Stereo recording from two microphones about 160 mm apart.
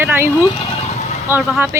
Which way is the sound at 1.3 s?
15° right (ahead or behind).